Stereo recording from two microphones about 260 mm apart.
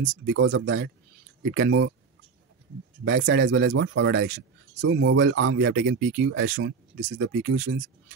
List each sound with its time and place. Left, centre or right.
0.3 s speech: right
3.1 s speech: right
7.2 s speech: right